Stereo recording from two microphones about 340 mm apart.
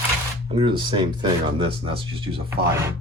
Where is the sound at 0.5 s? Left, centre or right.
Centre.